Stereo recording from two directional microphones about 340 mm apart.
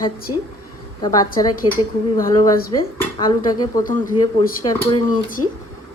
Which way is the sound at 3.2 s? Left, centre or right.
Centre.